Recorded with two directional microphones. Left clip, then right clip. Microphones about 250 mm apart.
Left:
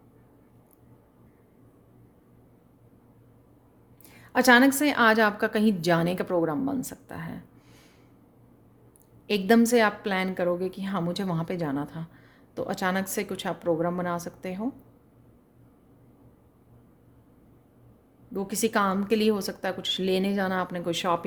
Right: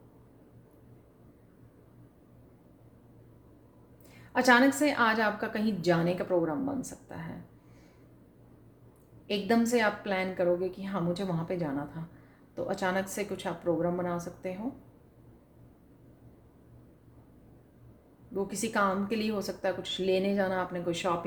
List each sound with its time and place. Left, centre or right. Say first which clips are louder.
4.1 s a woman's voice: left 4 dB; left
9.2 s a woman's voice: left 6 dB; left
18.3 s a woman's voice: left 4 dB; left